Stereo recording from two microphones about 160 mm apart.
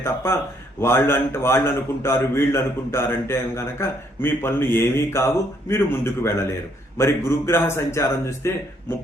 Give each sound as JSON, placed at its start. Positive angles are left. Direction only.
{"t": 0.0, "sound": "a man's voice", "side_deg": 15}